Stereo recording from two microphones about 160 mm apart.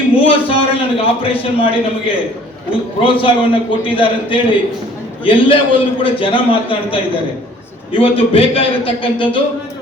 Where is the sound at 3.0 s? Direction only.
35° left (ahead or behind).